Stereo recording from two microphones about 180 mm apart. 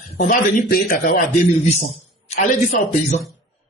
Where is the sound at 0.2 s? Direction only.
50° left (ahead or behind).